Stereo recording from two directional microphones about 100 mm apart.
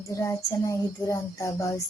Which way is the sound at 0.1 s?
30° left (ahead or behind).